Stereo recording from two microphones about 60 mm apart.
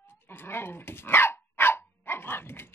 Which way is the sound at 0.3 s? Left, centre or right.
Left.